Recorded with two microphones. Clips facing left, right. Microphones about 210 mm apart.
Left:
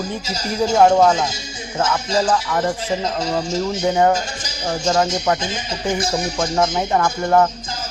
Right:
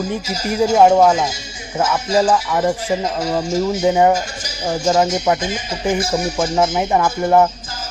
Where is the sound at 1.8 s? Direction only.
5° right (ahead or behind).